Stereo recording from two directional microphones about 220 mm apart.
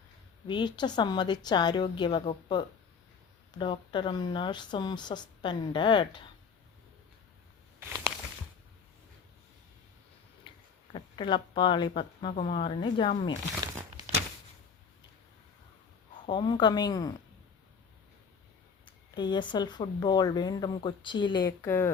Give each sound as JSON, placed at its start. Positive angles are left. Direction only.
{"t": 0.4, "sound": "speech", "side_deg": 20}
{"t": 7.8, "sound": "a sound", "side_deg": -15}
{"t": 10.5, "sound": "a sound", "side_deg": 20}
{"t": 10.9, "sound": "speech", "side_deg": 20}
{"t": 13.6, "sound": "crumpling", "side_deg": -20}
{"t": 16.2, "sound": "speech", "side_deg": 20}
{"t": 18.9, "sound": "speech", "side_deg": 20}